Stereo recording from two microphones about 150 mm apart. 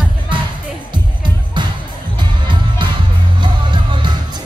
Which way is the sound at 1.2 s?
30° right (ahead or behind).